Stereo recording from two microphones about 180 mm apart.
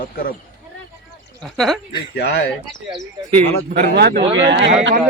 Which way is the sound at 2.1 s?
70° left (ahead or behind).